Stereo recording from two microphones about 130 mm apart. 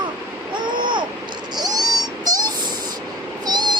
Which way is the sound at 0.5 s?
35° right (ahead or behind).